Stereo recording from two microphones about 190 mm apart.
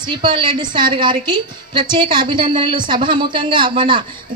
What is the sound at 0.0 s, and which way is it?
A woman's voice, 25° right (ahead or behind).